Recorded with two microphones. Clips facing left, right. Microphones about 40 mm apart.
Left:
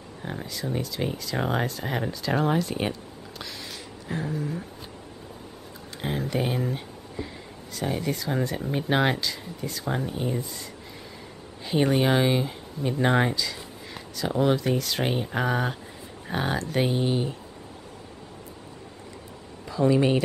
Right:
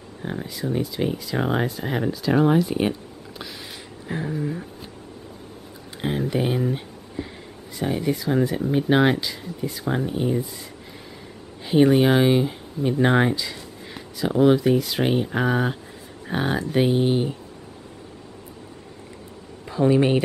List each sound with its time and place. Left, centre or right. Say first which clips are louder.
0.2 s speech: right 4 dB; centre
4.1 s speech: right 3 dB; centre
5.9 s a sound: right 4 dB; centre
7.7 s speech: right 4 dB; centre
11.6 s speech: right 6 dB; centre
16.9 s speech: right 5 dB; right
19.6 s speech: right 3 dB; right